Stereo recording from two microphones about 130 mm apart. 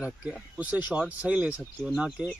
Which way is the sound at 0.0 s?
10° right (ahead or behind).